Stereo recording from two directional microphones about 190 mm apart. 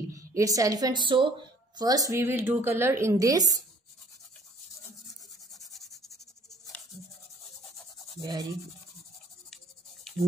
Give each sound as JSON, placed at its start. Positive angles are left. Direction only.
{"t": 0.1, "sound": "a woman's voice", "side_deg": -15}
{"t": 8.2, "sound": "rub", "side_deg": -20}